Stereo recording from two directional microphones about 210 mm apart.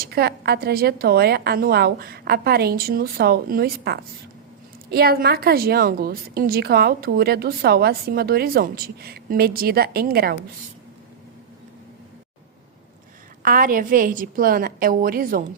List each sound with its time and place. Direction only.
0.0 s a woman's voice: 50° right (ahead or behind)
13.4 s a woman's voice: 40° right (ahead or behind)